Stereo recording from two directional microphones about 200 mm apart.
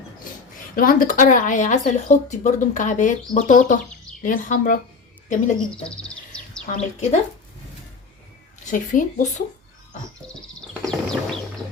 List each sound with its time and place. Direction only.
0.8 s speech: 45° left (ahead or behind)
6.7 s speech: 35° left (ahead or behind)
8.6 s speech: 40° left (ahead or behind)
10.8 s music: 5° left (ahead or behind)